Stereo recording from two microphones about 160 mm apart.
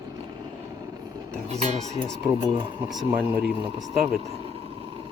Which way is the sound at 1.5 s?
45° right (ahead or behind).